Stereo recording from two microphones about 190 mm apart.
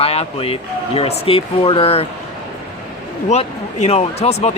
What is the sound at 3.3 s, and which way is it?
Speech, 35° left (ahead or behind).